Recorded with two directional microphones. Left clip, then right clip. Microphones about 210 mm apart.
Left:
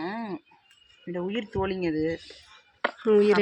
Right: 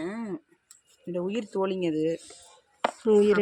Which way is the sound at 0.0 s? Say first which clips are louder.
Left 1 dB; 5° left (ahead or behind).